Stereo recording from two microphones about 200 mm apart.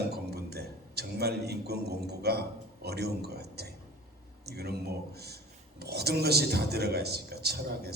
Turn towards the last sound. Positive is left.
turn(degrees=-55)  # may be behind; listen again after turning